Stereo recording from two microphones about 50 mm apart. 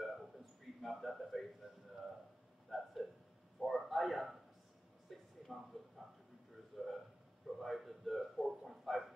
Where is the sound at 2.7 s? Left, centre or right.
Centre.